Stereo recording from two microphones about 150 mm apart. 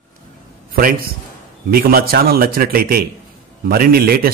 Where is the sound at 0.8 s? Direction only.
75° right (ahead or behind).